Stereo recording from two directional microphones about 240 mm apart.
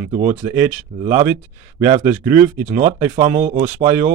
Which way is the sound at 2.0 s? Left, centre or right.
Centre.